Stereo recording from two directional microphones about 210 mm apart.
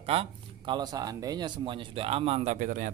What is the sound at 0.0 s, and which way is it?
Speech, 30° right (ahead or behind).